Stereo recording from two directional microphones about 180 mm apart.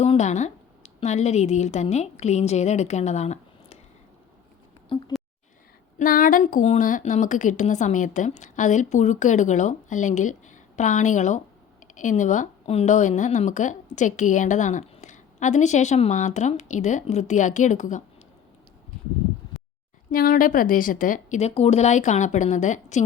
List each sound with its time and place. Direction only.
0.0 s a woman's voice: 40° left (ahead or behind)
4.9 s speech: 30° left (ahead or behind)
6.0 s a woman's voice: 50° left (ahead or behind)
20.1 s a woman's voice: 50° left (ahead or behind)